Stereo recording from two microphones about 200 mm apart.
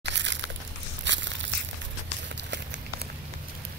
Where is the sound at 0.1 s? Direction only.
65° right (ahead or behind).